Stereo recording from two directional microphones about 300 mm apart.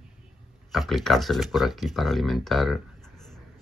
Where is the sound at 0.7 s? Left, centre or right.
Centre.